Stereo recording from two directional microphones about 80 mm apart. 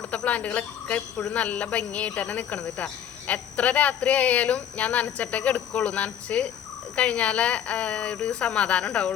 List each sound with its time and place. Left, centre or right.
0.1 s speech: centre